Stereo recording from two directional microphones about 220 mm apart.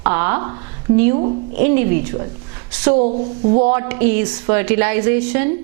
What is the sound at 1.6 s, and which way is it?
Speech, 15° right (ahead or behind).